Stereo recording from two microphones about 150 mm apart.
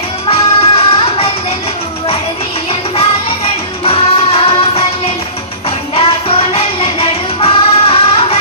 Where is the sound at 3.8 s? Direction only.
40° left (ahead or behind).